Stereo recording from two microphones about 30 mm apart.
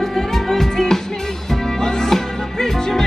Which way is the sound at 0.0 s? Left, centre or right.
Centre.